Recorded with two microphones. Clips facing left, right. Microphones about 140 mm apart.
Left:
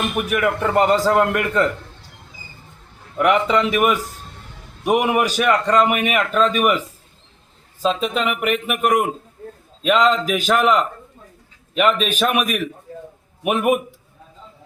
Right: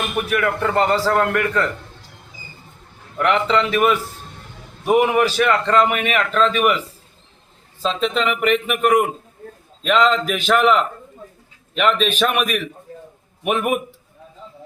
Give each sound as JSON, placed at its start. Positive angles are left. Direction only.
{"t": 0.3, "sound": "a man's voice", "side_deg": 15}
{"t": 3.2, "sound": "a man's voice", "side_deg": 10}
{"t": 7.8, "sound": "a man's voice", "side_deg": 10}